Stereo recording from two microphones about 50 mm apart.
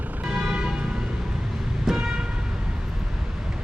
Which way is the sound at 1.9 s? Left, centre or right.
Centre.